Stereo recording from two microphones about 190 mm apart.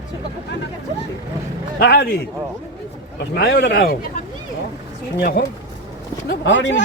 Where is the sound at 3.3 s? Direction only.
60° left (ahead or behind).